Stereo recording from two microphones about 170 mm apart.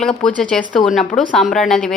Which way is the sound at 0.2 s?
5° left (ahead or behind).